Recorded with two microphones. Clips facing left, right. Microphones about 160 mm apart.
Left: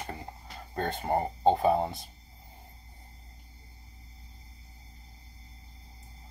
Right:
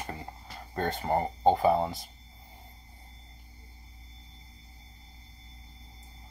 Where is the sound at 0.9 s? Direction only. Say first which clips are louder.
Even; 20° left (ahead or behind).